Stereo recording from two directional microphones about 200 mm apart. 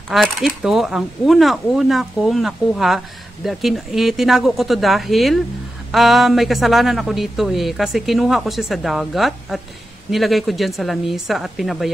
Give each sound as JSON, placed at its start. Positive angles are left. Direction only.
{"t": 0.1, "sound": "speech", "side_deg": 0}